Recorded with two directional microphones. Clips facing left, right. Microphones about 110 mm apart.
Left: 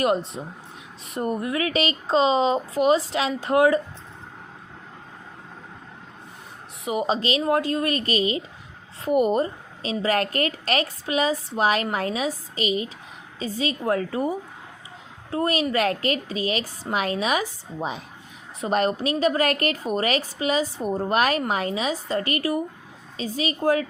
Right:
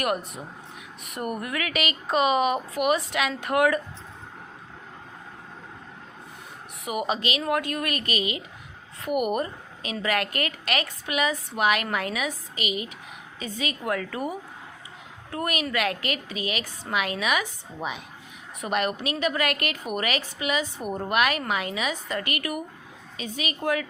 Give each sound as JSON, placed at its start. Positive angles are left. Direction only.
{"t": 0.0, "sound": "speech", "side_deg": 25}
{"t": 6.8, "sound": "a woman's voice", "side_deg": 25}